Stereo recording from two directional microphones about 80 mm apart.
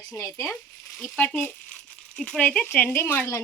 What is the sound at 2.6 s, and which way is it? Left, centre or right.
Speech, left.